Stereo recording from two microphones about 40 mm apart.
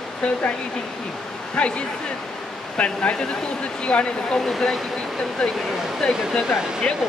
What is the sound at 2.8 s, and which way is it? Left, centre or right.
Speech, left.